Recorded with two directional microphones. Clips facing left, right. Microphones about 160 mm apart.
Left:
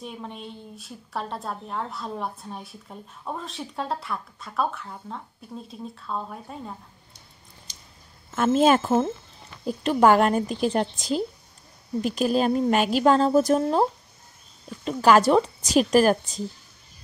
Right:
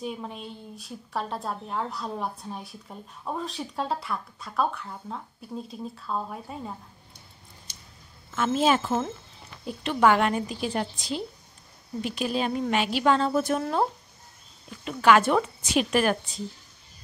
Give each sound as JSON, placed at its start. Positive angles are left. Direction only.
{"t": 0.0, "sound": "a woman's voice", "side_deg": 0}
{"t": 8.4, "sound": "a woman's voice", "side_deg": 45}
{"t": 14.9, "sound": "a woman's voice", "side_deg": 40}